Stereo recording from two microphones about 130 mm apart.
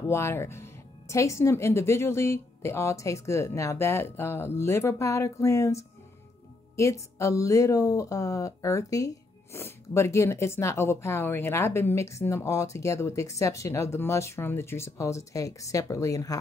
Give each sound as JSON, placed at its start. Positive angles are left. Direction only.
{"t": 0.0, "sound": "speech", "side_deg": 20}